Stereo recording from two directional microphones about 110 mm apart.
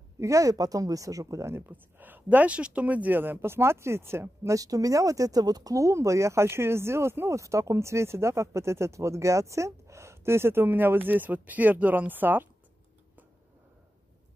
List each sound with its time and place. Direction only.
0.2 s a woman's voice: 30° right (ahead or behind)
1.7 s speech: 15° right (ahead or behind)